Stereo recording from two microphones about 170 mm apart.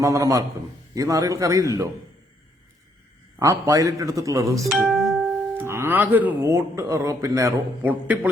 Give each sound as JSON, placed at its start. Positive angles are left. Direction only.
{"t": 0.0, "sound": "a man's voice", "side_deg": -20}
{"t": 3.3, "sound": "a man's voice", "side_deg": -20}
{"t": 4.6, "sound": "music", "side_deg": 0}
{"t": 5.5, "sound": "speech", "side_deg": -15}